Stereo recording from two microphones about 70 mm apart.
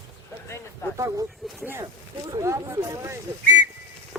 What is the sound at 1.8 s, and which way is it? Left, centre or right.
Speech, right.